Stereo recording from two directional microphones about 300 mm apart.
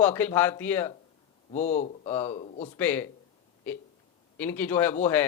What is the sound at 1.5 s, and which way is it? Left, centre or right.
Speech, left.